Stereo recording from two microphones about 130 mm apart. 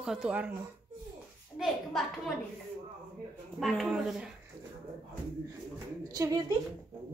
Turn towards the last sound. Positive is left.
turn(degrees=-25)  # may be behind; listen again after turning